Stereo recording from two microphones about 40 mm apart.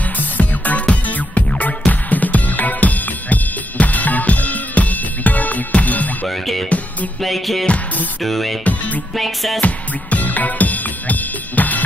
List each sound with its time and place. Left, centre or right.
0.2 s music: left
6.2 s music: centre
9.6 s music: left